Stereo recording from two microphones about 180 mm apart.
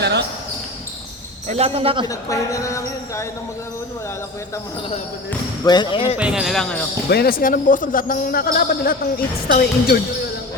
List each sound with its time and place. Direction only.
0.0 s basketball bounce: 70° right (ahead or behind)
1.5 s speech: 35° right (ahead or behind)
2.0 s a woman's voice: 20° left (ahead or behind)
5.6 s speech: 25° left (ahead or behind)
6.1 s speech: 5° right (ahead or behind)
7.1 s speech: 60° left (ahead or behind)